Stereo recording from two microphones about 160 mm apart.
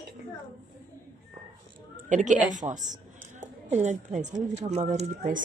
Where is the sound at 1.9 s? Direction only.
50° right (ahead or behind).